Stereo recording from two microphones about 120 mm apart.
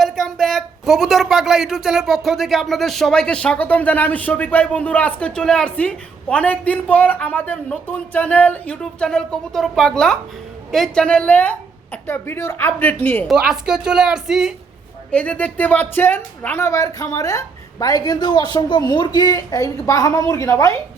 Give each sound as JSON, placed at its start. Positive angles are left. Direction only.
{"t": 0.0, "sound": "speech", "side_deg": 0}
{"t": 13.2, "sound": "a woman's voice", "side_deg": -5}
{"t": 15.1, "sound": "speech", "side_deg": 10}
{"t": 16.6, "sound": "a woman's voice", "side_deg": 25}